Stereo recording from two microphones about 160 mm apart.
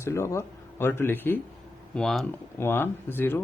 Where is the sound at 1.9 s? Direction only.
Centre (ahead or behind).